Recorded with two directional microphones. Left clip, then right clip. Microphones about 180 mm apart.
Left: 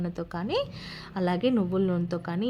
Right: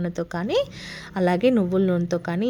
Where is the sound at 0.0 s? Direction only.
25° right (ahead or behind).